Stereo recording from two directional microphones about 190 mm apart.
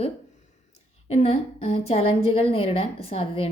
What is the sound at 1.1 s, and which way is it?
A woman's voice, 35° left (ahead or behind).